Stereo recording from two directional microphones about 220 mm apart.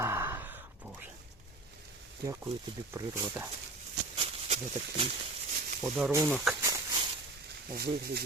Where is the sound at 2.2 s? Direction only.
15° right (ahead or behind).